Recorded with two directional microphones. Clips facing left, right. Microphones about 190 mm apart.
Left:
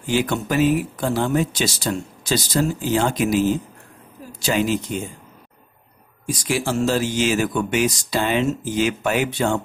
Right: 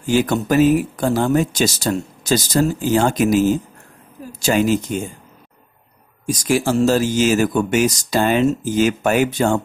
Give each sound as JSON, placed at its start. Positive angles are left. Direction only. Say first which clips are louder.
{"t": 0.0, "sound": "speech", "louder": "right 4 dB", "side_deg": -45}
{"t": 6.2, "sound": "speech", "louder": "right 5 dB", "side_deg": -45}